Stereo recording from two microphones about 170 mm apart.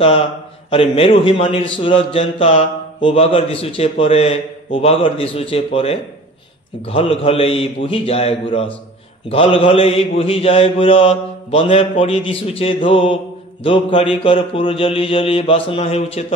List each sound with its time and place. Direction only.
0.7 s a man's voice: 35° left (ahead or behind)